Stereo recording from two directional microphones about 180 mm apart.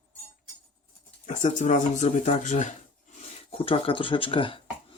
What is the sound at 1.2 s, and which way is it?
Speech, 45° left (ahead or behind).